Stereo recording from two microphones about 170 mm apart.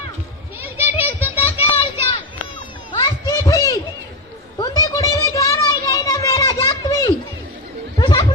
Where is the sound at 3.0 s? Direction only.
20° left (ahead or behind).